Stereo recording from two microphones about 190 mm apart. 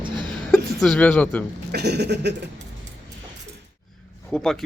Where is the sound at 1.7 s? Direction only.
60° right (ahead or behind).